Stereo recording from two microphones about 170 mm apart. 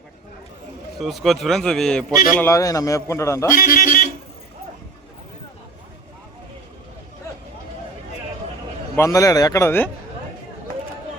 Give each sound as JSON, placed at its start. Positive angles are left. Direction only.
{"t": 0.9, "sound": "speech", "side_deg": 0}
{"t": 2.5, "sound": "a man's voice", "side_deg": 20}
{"t": 3.5, "sound": "speech", "side_deg": 55}
{"t": 9.0, "sound": "a man's voice", "side_deg": 20}